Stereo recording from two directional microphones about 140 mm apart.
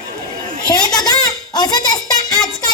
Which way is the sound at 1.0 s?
25° left (ahead or behind).